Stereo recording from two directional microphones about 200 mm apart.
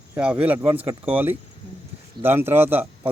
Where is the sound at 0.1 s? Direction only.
5° right (ahead or behind).